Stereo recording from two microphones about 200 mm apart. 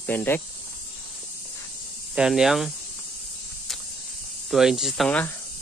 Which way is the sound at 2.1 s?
5° right (ahead or behind).